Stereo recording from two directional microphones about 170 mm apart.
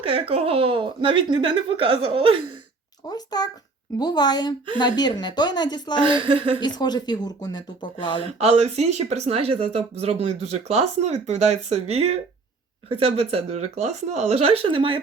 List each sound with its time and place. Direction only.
0.1 s speech: 35° right (ahead or behind)
3.1 s speech: 25° left (ahead or behind)
6.1 s speech: 30° right (ahead or behind)
6.6 s speech: 25° left (ahead or behind)
8.4 s speech: 40° right (ahead or behind)